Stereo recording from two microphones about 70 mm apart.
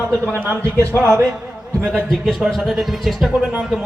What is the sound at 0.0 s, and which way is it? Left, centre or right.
Speech, right.